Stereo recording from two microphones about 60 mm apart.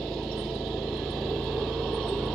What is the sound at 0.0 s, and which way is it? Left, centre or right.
Vehicle, centre.